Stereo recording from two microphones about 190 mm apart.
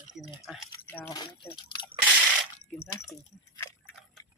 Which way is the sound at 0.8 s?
10° left (ahead or behind).